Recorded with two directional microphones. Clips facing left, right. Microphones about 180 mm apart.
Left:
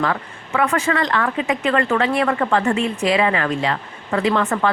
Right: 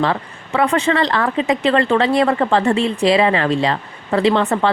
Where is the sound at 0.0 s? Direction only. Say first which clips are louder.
Right 3 dB; 30° right (ahead or behind).